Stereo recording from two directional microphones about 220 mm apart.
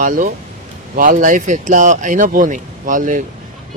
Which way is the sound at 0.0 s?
35° right (ahead or behind).